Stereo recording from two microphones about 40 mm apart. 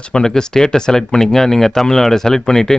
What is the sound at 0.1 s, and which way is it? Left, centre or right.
Speech, centre.